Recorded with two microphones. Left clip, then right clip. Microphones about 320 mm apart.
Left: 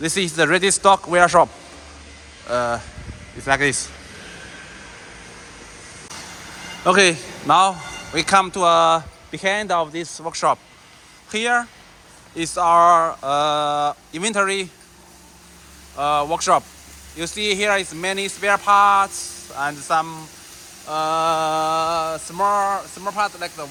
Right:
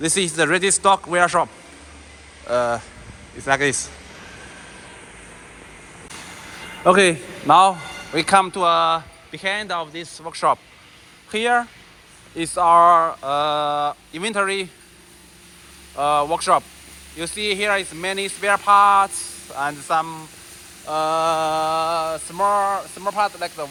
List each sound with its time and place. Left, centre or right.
0.0 s speech: centre
2.5 s speech: centre
6.8 s a man's voice: centre
16.0 s speech: centre